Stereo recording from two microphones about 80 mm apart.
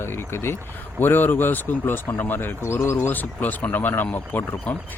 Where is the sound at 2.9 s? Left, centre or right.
Left.